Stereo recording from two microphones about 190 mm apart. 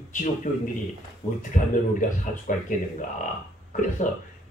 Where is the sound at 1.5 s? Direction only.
45° left (ahead or behind).